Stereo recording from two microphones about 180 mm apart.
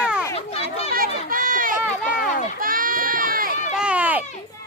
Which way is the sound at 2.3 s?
45° left (ahead or behind).